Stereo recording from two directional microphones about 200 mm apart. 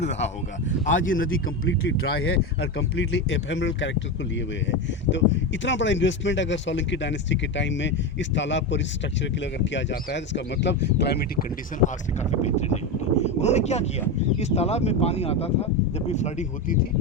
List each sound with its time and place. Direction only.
0.0 s speech: 60° left (ahead or behind)
0.9 s speech: 75° left (ahead or behind)
2.1 s speech: 50° left (ahead or behind)
12.2 s speech: 35° left (ahead or behind)